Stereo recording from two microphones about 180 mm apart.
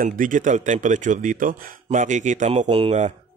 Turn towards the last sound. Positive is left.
turn(degrees=-35)  # may be behind; listen again after turning